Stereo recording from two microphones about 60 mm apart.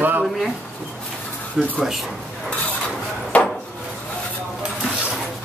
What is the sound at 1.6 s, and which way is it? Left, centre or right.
Speech, centre.